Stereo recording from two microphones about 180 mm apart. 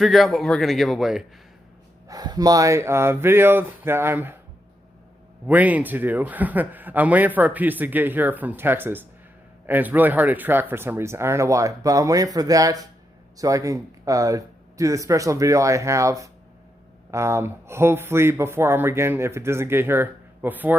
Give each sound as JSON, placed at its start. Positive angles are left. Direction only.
{"t": 0.0, "sound": "speech", "side_deg": 0}
{"t": 2.0, "sound": "speech", "side_deg": -20}
{"t": 5.5, "sound": "speech", "side_deg": -10}